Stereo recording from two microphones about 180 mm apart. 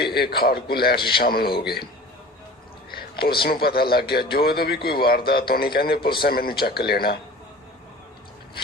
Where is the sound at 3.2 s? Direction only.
60° left (ahead or behind).